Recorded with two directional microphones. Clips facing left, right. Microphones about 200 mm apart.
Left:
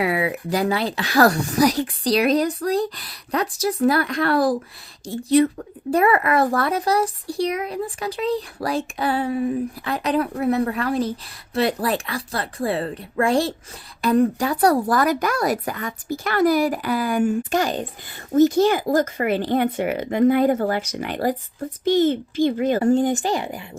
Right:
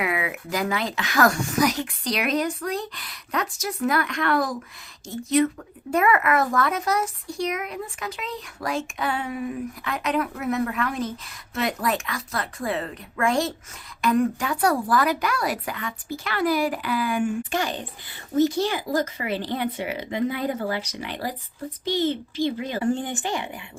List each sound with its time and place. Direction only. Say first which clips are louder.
0.0 s a woman's voice: left 5 dB; 35° left (ahead or behind)